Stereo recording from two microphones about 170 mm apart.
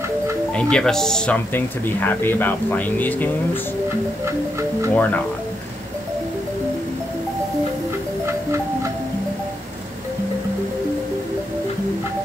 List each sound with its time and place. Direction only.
0.6 s speech: 5° left (ahead or behind)
4.9 s speech: 10° left (ahead or behind)